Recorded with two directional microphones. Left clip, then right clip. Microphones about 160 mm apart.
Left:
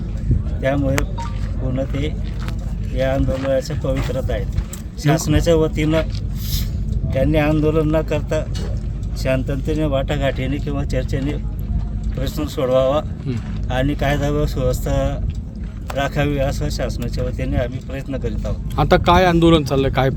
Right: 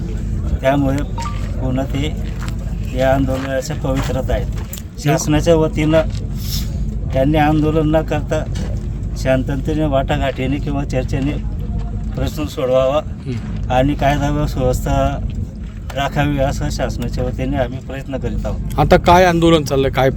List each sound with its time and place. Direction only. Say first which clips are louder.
0.6 s speech: right 4 dB; 10° right (ahead or behind)
7.1 s speech: right 3 dB; 5° right (ahead or behind)